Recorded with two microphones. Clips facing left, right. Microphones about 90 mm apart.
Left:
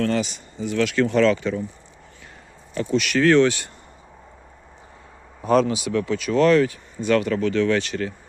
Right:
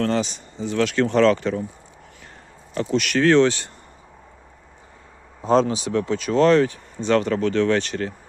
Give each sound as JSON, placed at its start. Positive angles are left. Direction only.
{"t": 0.0, "sound": "speech", "side_deg": -35}
{"t": 2.7, "sound": "speech", "side_deg": -45}
{"t": 5.4, "sound": "speech", "side_deg": -30}